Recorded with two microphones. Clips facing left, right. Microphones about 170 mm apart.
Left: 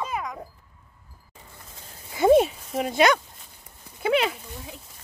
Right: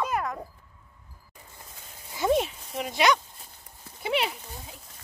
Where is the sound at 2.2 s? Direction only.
55° left (ahead or behind).